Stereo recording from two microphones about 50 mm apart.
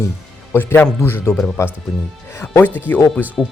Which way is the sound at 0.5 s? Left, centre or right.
Left.